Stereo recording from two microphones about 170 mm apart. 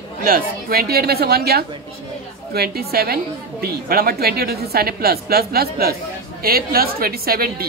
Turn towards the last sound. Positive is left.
turn(degrees=-60)  # may be behind; listen again after turning